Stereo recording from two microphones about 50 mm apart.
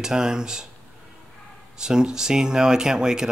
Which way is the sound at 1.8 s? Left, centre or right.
Centre.